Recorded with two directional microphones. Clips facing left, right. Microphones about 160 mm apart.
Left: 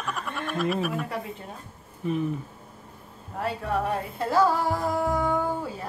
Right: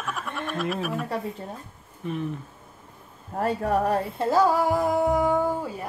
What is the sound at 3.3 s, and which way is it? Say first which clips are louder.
Speech: right 4 dB; 45° right (ahead or behind).